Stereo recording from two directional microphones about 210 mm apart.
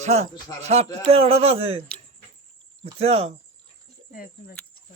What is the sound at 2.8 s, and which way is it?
Speech, 30° right (ahead or behind).